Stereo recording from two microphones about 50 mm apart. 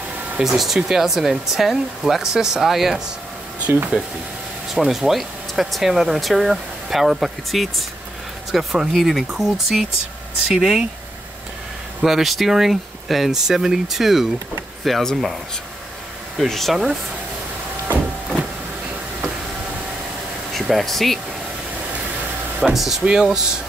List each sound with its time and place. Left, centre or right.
0.4 s speech: centre
3.6 s speech: right
4.7 s speech: centre
12.0 s speech: centre
16.3 s speech: centre
20.6 s speech: centre
22.8 s speech: centre